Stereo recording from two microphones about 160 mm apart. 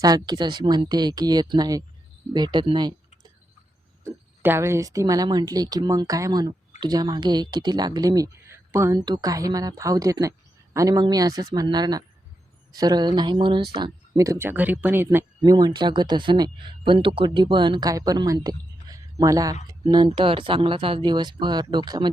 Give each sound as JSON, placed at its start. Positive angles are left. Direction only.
{"t": 0.0, "sound": "speech", "side_deg": -25}
{"t": 4.0, "sound": "speech", "side_deg": -15}
{"t": 15.4, "sound": "speech", "side_deg": -25}